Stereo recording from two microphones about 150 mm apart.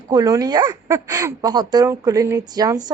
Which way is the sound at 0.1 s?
25° right (ahead or behind).